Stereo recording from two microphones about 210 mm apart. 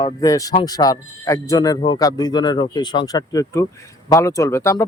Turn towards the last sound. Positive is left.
turn(degrees=15)  # may be behind; listen again after turning